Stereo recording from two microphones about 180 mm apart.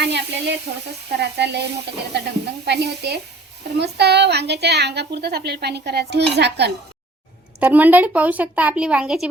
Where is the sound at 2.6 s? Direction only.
65° right (ahead or behind).